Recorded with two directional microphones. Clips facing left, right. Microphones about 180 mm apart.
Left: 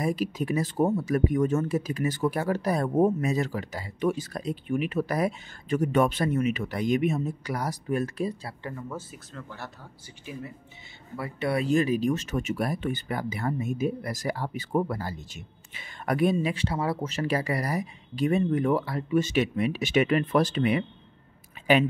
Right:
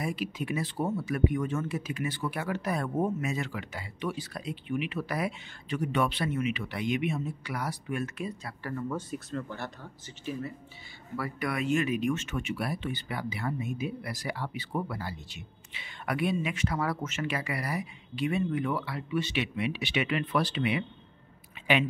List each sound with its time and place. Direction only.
0.0 s speech: 40° left (ahead or behind)
8.8 s speech: centre (ahead or behind)
10.0 s speech: 15° left (ahead or behind)
11.1 s speech: 25° left (ahead or behind); by 20.8 s 45° left (ahead or behind)
21.6 s a sound: 40° left (ahead or behind)